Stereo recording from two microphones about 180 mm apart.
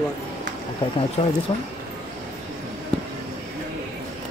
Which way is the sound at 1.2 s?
45° left (ahead or behind).